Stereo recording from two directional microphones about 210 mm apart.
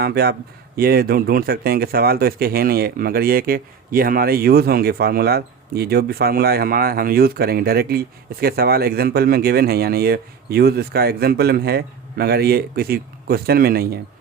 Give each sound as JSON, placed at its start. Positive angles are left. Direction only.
{"t": 0.0, "sound": "speech", "side_deg": -50}